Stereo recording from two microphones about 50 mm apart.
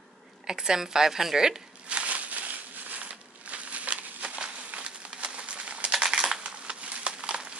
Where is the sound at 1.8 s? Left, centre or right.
Right.